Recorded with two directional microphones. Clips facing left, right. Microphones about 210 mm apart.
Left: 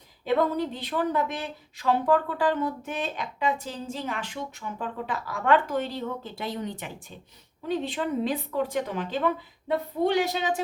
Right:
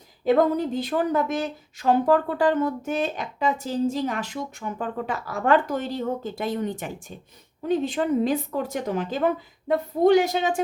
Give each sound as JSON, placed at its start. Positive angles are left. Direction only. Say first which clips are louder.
{"t": 0.3, "sound": "speech", "louder": "right 5 dB", "side_deg": -45}